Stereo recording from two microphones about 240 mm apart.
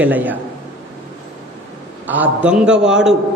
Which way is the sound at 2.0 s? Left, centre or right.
Centre.